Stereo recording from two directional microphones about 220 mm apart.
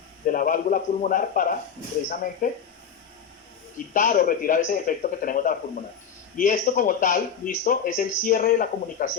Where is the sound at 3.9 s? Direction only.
40° left (ahead or behind).